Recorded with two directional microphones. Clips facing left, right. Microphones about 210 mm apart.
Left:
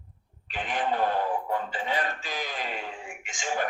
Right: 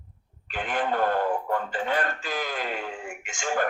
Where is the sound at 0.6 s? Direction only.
50° right (ahead or behind).